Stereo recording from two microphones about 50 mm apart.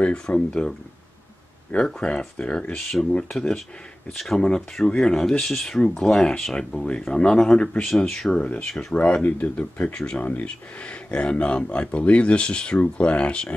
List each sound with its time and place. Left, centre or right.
0.0 s speech: left
1.8 s speech: centre
8.9 s speech: left